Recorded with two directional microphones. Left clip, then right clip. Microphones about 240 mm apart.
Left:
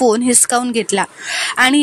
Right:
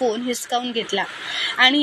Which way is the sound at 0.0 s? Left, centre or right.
Left.